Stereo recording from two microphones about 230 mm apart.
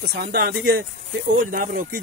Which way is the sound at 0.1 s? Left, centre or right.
Right.